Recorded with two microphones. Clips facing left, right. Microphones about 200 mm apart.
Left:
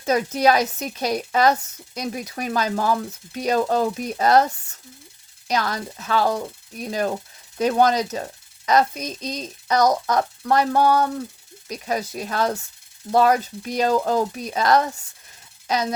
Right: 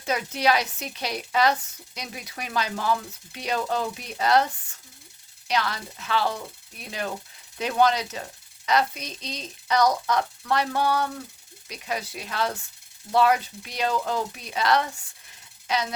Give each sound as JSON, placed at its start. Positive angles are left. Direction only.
{"t": 0.0, "sound": "speech", "side_deg": 40}